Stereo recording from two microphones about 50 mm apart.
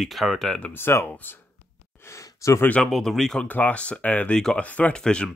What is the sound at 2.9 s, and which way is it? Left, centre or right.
Speech, centre.